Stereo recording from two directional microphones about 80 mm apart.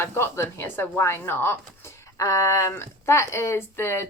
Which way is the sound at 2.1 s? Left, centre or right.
Left.